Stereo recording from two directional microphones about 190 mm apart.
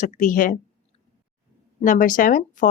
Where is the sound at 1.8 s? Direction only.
45° left (ahead or behind).